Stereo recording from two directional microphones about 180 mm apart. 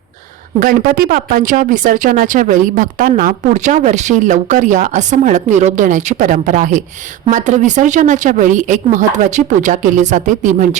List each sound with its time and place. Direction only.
0.6 s speech: 55° right (ahead or behind)